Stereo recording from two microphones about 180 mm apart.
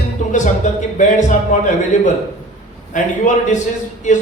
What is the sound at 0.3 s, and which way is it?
A man's voice, 45° left (ahead or behind).